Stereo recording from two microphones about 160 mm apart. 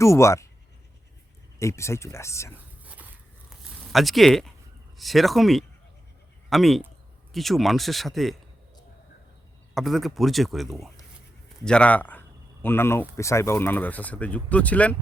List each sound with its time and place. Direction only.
0.0 s speech: 20° left (ahead or behind)
1.5 s speech: 20° left (ahead or behind)
2.8 s dog: 10° right (ahead or behind)
3.9 s speech: centre (ahead or behind)
9.7 s speech: centre (ahead or behind)